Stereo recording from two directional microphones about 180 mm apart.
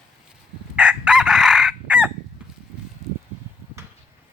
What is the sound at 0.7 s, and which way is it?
Chicken, 5° right (ahead or behind).